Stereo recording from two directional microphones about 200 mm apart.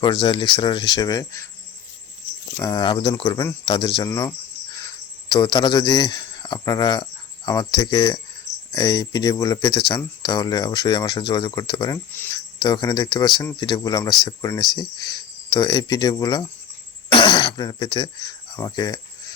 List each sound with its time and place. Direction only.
0.0 s speech: 25° left (ahead or behind)
2.6 s a man's voice: 20° left (ahead or behind)